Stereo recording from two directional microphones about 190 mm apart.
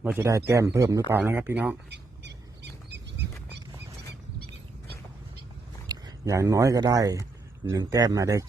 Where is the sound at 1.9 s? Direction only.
65° right (ahead or behind).